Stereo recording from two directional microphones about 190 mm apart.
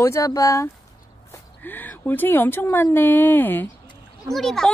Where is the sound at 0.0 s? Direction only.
15° left (ahead or behind).